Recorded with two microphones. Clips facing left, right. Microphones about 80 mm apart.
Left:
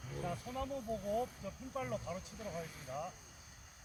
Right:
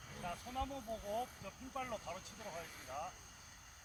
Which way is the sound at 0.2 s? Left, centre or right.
Centre.